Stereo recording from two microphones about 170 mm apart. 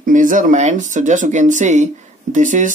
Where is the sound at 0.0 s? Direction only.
50° right (ahead or behind).